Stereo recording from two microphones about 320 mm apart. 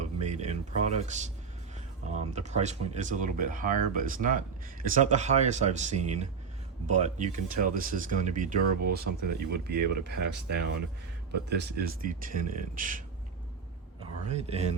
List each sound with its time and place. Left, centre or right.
0.0 s a sound: right
2.3 s speech: right
14.0 s a man's voice: centre